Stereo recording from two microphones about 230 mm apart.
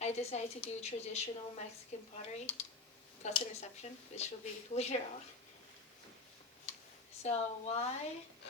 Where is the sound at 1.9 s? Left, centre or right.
Left.